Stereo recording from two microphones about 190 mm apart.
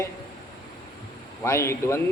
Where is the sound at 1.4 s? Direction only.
15° left (ahead or behind).